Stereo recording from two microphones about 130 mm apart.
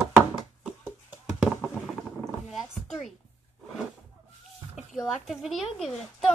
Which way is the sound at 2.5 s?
Centre (ahead or behind).